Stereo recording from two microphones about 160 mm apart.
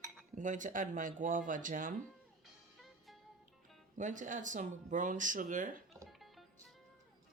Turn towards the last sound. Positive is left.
turn(degrees=0)  # may be behind; listen again after turning